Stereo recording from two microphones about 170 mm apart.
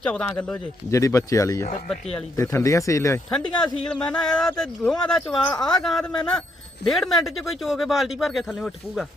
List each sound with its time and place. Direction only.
0.0 s speech: 5° left (ahead or behind)
3.3 s speech: 5° left (ahead or behind)